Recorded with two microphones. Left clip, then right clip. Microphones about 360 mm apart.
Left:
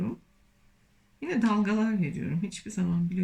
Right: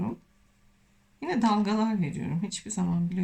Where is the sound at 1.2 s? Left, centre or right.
Centre.